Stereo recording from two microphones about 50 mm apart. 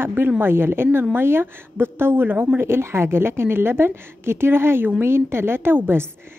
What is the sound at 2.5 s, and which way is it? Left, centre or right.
A woman's voice, right.